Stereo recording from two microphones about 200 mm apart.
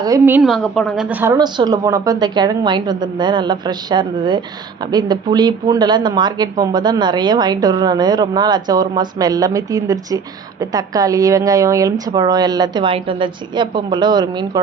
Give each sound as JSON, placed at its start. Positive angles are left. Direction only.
{"t": 0.0, "sound": "a woman's voice", "side_deg": -15}
{"t": 0.5, "sound": "a woman's voice", "side_deg": 5}
{"t": 1.4, "sound": "speech", "side_deg": -20}